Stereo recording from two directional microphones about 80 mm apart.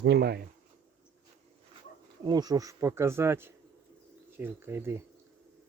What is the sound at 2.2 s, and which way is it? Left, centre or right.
Speech, right.